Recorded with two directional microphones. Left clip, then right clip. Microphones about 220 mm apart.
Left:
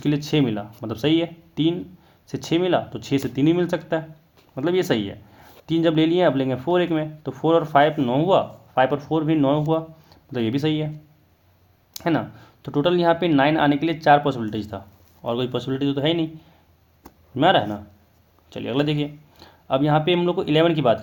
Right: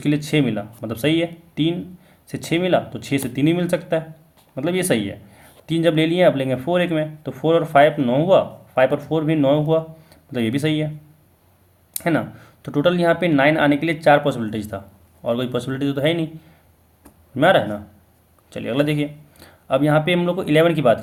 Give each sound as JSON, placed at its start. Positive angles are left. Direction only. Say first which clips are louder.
{"t": 0.0, "sound": "speech", "louder": "right 2 dB", "side_deg": 20}
{"t": 11.9, "sound": "speech", "louder": "right 2 dB", "side_deg": 20}
{"t": 17.0, "sound": "a sound", "louder": "right 2 dB", "side_deg": 20}
{"t": 18.5, "sound": "speech", "louder": "right 3 dB", "side_deg": 20}